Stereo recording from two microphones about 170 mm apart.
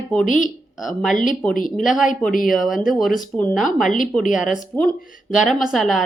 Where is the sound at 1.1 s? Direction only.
50° left (ahead or behind).